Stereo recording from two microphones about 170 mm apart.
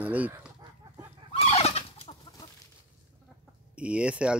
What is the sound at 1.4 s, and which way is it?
Turkey, 35° left (ahead or behind).